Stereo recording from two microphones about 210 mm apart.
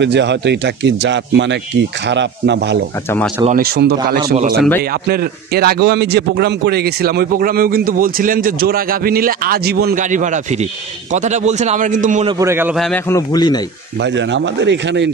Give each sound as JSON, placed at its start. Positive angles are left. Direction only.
{"t": 0.0, "sound": "speech", "side_deg": -55}
{"t": 3.4, "sound": "a man's voice", "side_deg": -45}
{"t": 12.3, "sound": "a man's voice", "side_deg": -15}
{"t": 12.7, "sound": "a man's voice", "side_deg": 0}
{"t": 13.1, "sound": "speech", "side_deg": 20}
{"t": 14.0, "sound": "speech", "side_deg": -60}